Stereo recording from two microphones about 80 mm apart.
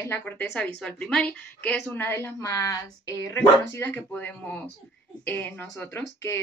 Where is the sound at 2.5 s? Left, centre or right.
Left.